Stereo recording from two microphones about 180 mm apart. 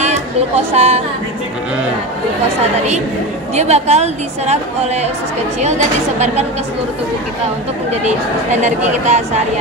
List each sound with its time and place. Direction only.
0.0 s a woman's voice: 35° right (ahead or behind)
3.5 s a woman's voice: 35° right (ahead or behind)
5.6 s a woman's voice: 40° right (ahead or behind)
8.5 s a woman's voice: 40° right (ahead or behind)